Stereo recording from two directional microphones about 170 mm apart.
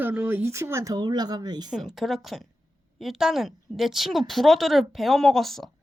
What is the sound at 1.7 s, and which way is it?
A woman's voice, centre (ahead or behind).